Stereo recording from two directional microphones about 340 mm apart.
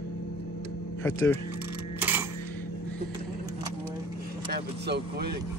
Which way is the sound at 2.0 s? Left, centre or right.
Centre.